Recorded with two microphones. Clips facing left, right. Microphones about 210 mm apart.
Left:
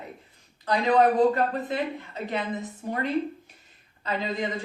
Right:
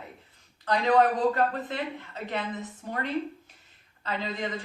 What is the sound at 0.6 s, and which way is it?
Speech, 10° left (ahead or behind).